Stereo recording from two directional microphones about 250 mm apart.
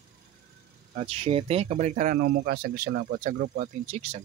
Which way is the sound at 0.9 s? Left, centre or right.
Right.